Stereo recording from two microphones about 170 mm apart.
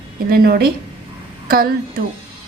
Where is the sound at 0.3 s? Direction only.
60° right (ahead or behind).